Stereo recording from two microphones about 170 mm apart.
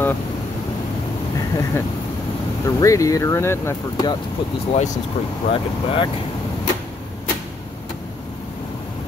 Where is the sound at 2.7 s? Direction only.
20° left (ahead or behind).